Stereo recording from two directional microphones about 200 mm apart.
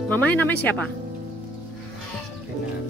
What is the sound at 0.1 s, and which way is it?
Speech, 10° left (ahead or behind).